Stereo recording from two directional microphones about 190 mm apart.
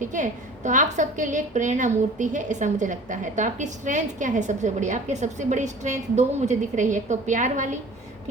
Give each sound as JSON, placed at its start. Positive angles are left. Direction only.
{"t": 0.0, "sound": "a woman's voice", "side_deg": -40}